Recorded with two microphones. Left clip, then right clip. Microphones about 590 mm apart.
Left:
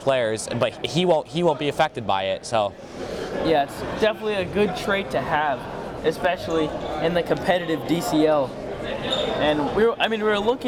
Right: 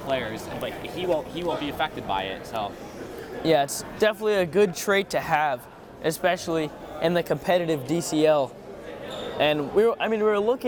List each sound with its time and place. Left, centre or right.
0.1 s speech: left
1.6 s speech: left
3.4 s a man's voice: right
10.0 s speech: centre